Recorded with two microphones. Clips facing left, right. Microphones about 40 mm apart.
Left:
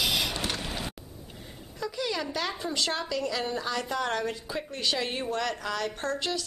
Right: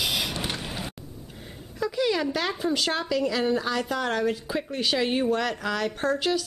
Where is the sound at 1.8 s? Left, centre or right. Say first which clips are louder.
Right 6 dB; centre.